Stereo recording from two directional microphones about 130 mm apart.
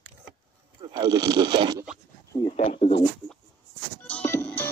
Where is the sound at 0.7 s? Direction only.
35° right (ahead or behind).